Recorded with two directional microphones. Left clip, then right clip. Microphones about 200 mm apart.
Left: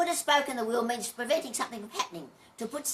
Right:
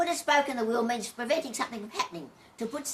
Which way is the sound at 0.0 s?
15° left (ahead or behind).